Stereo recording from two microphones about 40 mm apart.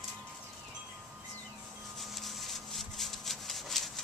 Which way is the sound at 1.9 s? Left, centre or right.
Centre.